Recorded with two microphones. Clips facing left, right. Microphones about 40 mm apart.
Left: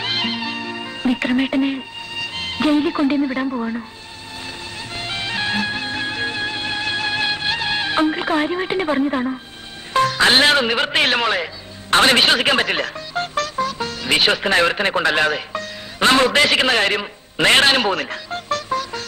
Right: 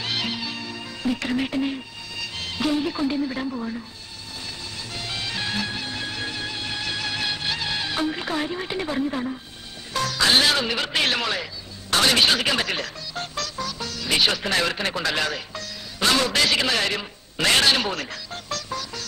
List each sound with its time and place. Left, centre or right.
0.0 s music: left
4.9 s music: left
9.9 s a man's voice: left